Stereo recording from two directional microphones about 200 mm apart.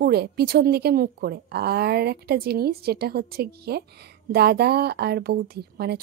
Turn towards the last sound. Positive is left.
turn(degrees=-50)  # may be behind; listen again after turning